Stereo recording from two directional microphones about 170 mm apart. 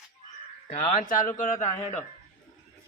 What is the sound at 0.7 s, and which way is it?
Speech, 50° left (ahead or behind).